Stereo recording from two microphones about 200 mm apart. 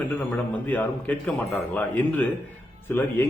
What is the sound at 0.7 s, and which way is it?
Speech, 5° left (ahead or behind).